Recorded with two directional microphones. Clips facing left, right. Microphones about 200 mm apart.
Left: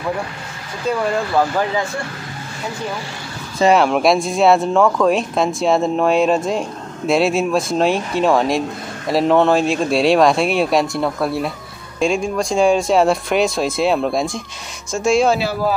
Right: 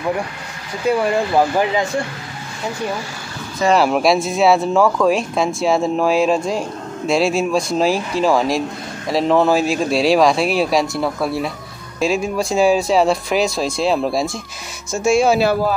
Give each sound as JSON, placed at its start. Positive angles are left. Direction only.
{"t": 0.8, "sound": "speech", "side_deg": -15}
{"t": 3.7, "sound": "speech", "side_deg": 0}